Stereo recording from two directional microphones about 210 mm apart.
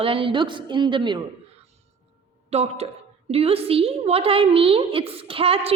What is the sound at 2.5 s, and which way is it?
A woman's voice, 30° right (ahead or behind).